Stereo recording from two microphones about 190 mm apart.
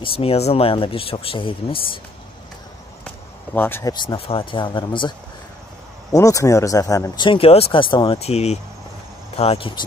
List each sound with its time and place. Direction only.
0.5 s speech: 30° left (ahead or behind)
3.5 s speech: 10° left (ahead or behind)
4.0 s speech: 25° left (ahead or behind)
6.1 s speech: 15° left (ahead or behind)